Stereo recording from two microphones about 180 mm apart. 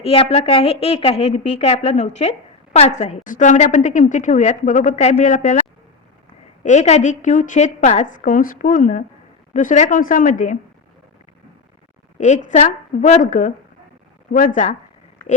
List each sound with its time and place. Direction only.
0.0 s a woman's voice: 35° left (ahead or behind)
12.1 s a woman's voice: 40° left (ahead or behind)